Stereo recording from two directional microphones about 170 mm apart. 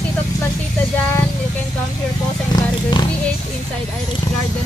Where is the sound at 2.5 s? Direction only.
25° left (ahead or behind).